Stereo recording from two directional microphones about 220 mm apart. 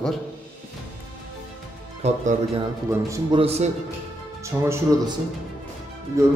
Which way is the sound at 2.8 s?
25° right (ahead or behind).